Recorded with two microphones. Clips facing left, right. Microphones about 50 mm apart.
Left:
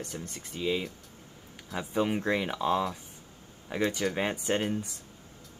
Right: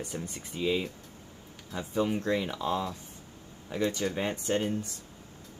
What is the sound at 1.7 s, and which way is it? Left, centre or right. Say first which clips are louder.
Speech: left 1 dB; left.